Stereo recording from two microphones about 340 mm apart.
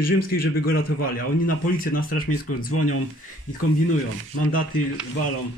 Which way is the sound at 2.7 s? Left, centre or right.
Left.